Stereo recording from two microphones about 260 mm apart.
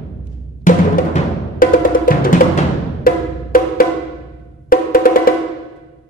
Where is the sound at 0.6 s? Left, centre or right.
Left.